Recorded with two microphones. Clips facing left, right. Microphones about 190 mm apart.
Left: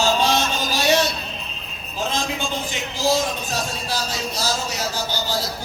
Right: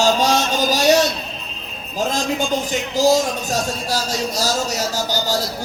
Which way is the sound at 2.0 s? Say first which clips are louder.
Right 5 dB; 40° right (ahead or behind).